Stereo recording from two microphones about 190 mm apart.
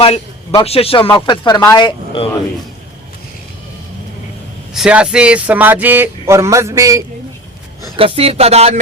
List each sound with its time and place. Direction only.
0.6 s speech: 30° left (ahead or behind)
4.7 s speech: 5° right (ahead or behind)
7.9 s speech: 30° right (ahead or behind)